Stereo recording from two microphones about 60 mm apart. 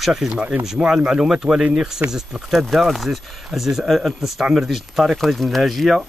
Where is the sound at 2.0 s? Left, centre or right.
Right.